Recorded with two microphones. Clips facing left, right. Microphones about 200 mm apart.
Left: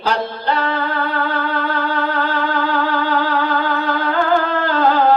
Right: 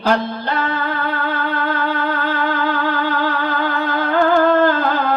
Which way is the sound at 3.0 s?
50° right (ahead or behind).